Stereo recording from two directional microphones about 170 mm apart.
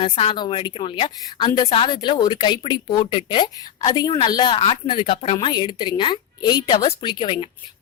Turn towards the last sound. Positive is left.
turn(degrees=30)  # may be behind; listen again after turning